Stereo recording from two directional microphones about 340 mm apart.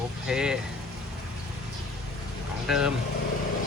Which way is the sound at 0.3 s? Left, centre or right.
Centre.